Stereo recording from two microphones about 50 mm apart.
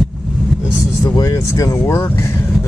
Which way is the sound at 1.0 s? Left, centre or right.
Left.